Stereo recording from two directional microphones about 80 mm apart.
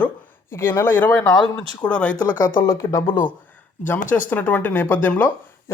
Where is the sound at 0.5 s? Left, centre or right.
Left.